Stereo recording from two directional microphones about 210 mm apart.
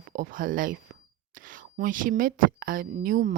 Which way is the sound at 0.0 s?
40° right (ahead or behind).